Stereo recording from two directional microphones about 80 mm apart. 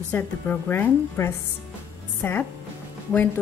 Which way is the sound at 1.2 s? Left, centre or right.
Left.